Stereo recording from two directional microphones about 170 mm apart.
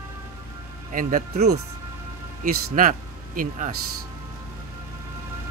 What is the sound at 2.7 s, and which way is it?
Speech, 50° right (ahead or behind).